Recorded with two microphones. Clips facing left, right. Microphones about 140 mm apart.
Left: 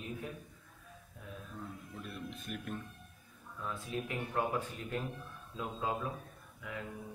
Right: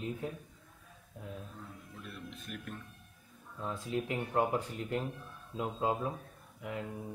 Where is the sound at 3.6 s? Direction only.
25° right (ahead or behind).